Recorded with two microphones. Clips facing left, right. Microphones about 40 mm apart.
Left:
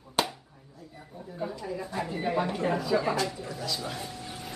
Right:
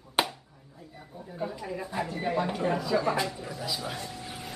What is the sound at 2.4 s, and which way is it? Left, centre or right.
Speech, centre.